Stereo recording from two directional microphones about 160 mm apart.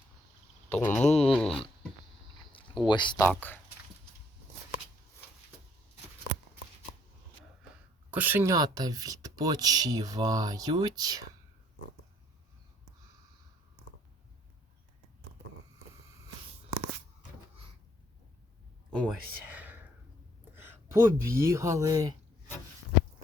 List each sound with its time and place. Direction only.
0.7 s speech: 10° left (ahead or behind)
1.0 s speech: 40° left (ahead or behind)
1.3 s speech: 5° left (ahead or behind)
2.8 s speech: 30° left (ahead or behind)
3.2 s speech: 10° left (ahead or behind)
8.1 s speech: 10° right (ahead or behind)
8.5 s speech: 25° right (ahead or behind)
18.9 s a sound: 5° left (ahead or behind)
19.5 s whispering: 10° right (ahead or behind)
20.6 s speech: 15° right (ahead or behind)